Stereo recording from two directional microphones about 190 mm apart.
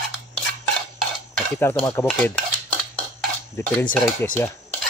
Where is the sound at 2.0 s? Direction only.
10° left (ahead or behind).